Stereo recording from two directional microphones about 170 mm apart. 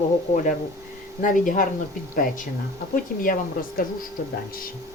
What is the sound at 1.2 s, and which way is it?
Speech, 50° left (ahead or behind).